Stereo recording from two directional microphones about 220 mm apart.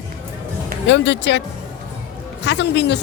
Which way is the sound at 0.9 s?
55° left (ahead or behind).